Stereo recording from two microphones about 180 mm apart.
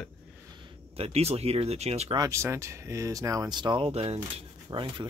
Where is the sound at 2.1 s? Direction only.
15° right (ahead or behind).